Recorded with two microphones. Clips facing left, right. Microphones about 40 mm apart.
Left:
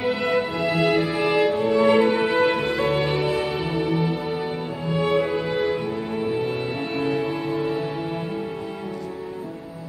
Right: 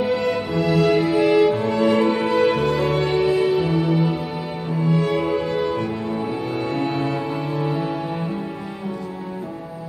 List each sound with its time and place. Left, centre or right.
0.0 s music: centre